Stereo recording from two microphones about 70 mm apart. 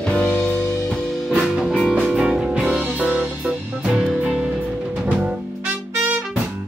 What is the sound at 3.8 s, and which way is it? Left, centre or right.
Music, centre.